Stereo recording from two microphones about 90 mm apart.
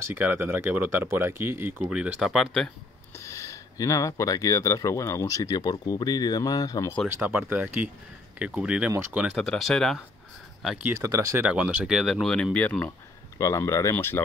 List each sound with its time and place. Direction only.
0.0 s speech: 25° right (ahead or behind)
1.9 s speech: 15° right (ahead or behind)
2.1 s speech: centre (ahead or behind)
3.2 s speech: 30° left (ahead or behind)
7.2 s speech: 20° right (ahead or behind)
9.3 s speech: centre (ahead or behind)
10.8 s speech: 30° right (ahead or behind)
11.4 s speech: 15° right (ahead or behind); by 12.4 s 5° left (ahead or behind)
12.5 s speech: 15° left (ahead or behind)
13.4 s speech: 35° left (ahead or behind)